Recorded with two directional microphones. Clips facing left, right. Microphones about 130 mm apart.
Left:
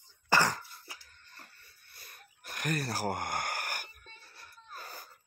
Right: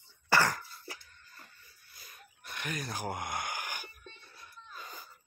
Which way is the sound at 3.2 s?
65° left (ahead or behind).